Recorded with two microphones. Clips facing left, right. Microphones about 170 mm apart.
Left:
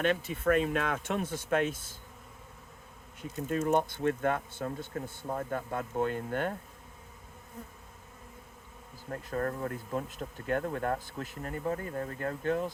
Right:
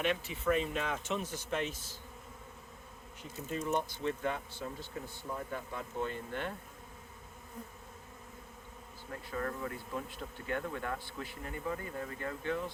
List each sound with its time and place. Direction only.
0.0 s speech: 50° left (ahead or behind)
3.5 s speech: 55° left (ahead or behind)
9.0 s speech: 45° left (ahead or behind)